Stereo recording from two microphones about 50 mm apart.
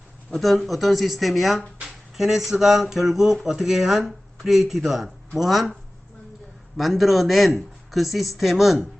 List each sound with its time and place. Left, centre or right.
0.3 s speech: centre
6.7 s speech: centre